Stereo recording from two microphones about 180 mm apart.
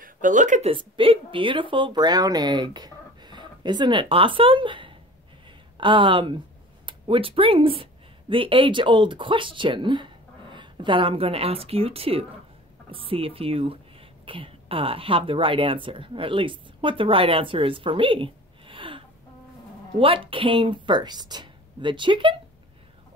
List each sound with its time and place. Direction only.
0.0 s speech: 45° right (ahead or behind); by 22.4 s 25° right (ahead or behind)